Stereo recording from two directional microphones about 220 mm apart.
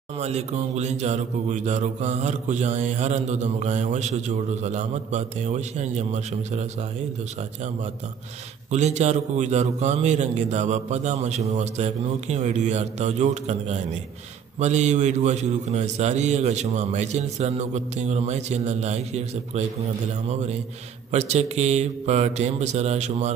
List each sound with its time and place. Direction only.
0.2 s speech: 30° right (ahead or behind)
8.7 s speech: 30° right (ahead or behind)